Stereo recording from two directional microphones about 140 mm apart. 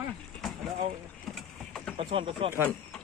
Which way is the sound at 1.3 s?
5° left (ahead or behind).